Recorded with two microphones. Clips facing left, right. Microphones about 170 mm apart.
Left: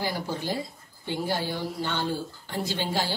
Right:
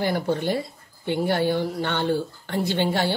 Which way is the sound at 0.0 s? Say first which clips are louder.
Right 7 dB; 60° right (ahead or behind).